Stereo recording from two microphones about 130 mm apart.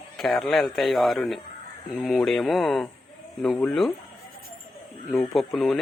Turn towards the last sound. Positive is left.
turn(degrees=0)  # may be behind; listen again after turning